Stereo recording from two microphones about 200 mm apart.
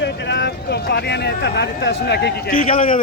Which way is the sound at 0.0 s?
60° left (ahead or behind).